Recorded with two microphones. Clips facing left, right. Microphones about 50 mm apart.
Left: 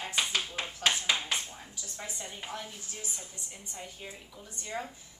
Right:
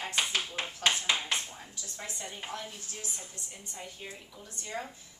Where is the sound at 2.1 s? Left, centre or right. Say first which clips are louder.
Right 1 dB; centre.